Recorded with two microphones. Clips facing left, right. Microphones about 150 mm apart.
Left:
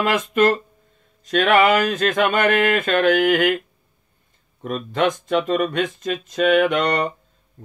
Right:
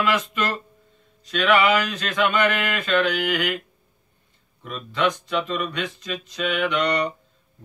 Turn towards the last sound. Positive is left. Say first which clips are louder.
# left 3 dB
turn(degrees=50)  # may be behind; listen again after turning